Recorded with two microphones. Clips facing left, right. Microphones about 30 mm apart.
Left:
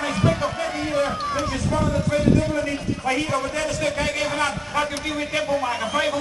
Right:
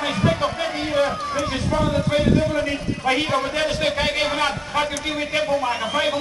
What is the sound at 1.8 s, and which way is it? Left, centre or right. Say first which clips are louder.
A man's voice: even; right.